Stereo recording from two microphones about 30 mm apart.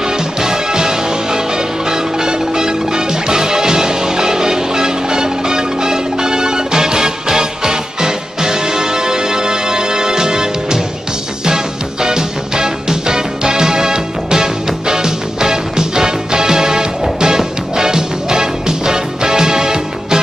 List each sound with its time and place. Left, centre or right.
0.4 s music: right